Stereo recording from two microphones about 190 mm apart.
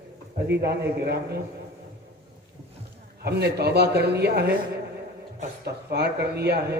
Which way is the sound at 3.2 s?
60° right (ahead or behind).